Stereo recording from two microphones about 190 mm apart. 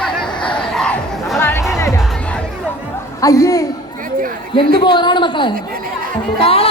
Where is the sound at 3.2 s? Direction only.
15° left (ahead or behind).